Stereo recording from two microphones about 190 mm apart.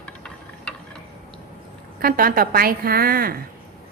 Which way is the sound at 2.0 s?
50° right (ahead or behind).